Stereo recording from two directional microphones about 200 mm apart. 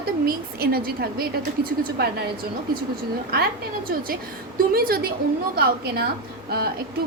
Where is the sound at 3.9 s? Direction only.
45° right (ahead or behind).